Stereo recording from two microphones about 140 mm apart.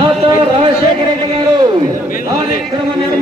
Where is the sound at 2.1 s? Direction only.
85° left.